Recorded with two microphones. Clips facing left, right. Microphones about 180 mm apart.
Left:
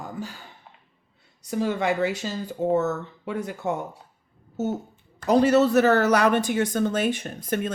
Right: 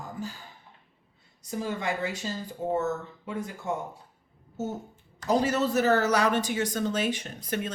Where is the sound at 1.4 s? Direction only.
70° left (ahead or behind).